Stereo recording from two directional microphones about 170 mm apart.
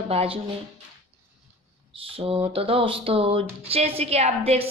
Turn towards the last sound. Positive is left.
turn(degrees=-35)  # may be behind; listen again after turning